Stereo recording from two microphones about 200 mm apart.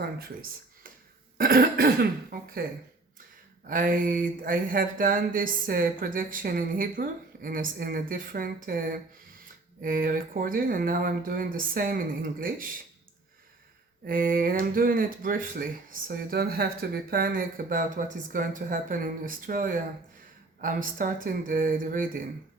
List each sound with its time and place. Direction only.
1.4 s speech: 45° right (ahead or behind)
3.7 s speech: 40° right (ahead or behind)
9.8 s speech: 45° right (ahead or behind)
14.1 s speech: 45° right (ahead or behind)